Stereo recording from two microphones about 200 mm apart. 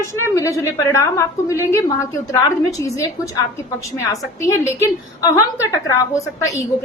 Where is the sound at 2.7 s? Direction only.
15° left (ahead or behind).